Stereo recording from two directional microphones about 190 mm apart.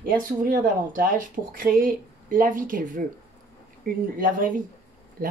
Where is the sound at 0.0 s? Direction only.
45° right (ahead or behind).